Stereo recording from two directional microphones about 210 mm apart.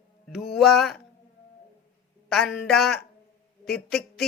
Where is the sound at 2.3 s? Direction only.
Centre (ahead or behind).